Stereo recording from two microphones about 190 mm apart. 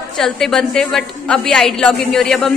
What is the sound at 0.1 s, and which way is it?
A woman's voice, centre (ahead or behind).